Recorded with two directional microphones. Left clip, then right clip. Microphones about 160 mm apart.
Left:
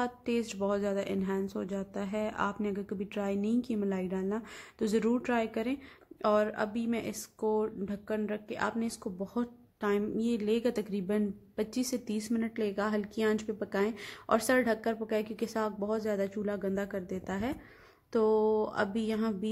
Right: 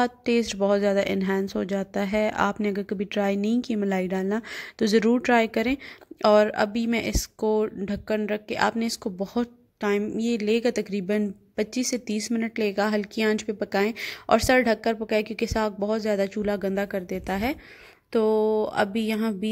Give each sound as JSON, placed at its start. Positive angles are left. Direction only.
{"t": 0.0, "sound": "speech", "side_deg": -35}
{"t": 18.1, "sound": "speech", "side_deg": -20}